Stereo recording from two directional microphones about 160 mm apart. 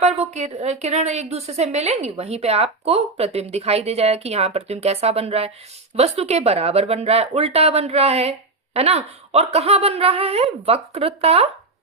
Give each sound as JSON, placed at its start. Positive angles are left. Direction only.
{"t": 0.0, "sound": "a woman's voice", "side_deg": -45}